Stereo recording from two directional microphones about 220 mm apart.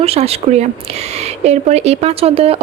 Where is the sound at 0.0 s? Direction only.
25° right (ahead or behind).